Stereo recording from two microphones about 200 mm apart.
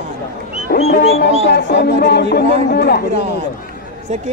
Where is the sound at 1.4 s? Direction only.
55° left (ahead or behind).